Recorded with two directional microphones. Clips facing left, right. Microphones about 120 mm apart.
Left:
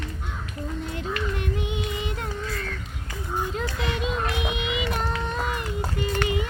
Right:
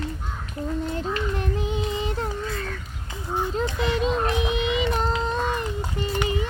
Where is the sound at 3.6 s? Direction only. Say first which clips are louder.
Right 4 dB; 30° right (ahead or behind).